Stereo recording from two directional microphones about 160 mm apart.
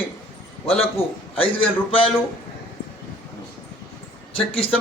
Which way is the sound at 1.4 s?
35° left (ahead or behind).